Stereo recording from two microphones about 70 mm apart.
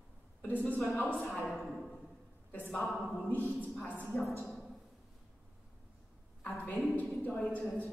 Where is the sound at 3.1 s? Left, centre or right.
Left.